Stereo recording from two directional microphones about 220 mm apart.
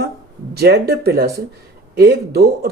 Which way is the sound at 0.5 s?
45° right (ahead or behind).